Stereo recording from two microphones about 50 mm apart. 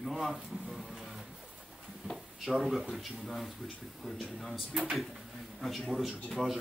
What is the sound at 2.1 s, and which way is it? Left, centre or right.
Speech, centre.